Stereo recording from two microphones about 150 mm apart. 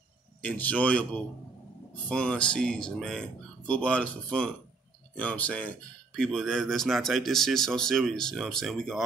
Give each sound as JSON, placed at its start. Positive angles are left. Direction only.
{"t": 0.4, "sound": "speech", "side_deg": 10}